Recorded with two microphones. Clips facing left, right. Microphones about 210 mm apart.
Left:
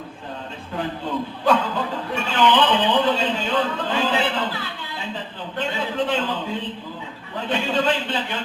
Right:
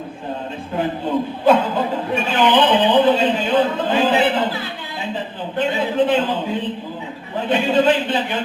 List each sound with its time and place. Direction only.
0.8 s a man's voice: 15° right (ahead or behind)